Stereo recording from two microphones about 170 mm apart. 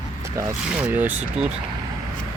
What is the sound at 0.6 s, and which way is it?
Speech, 5° right (ahead or behind).